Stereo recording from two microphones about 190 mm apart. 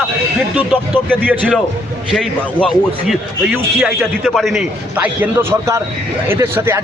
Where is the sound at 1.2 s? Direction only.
10° right (ahead or behind).